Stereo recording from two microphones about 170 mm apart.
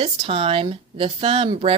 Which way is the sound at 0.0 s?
30° right (ahead or behind).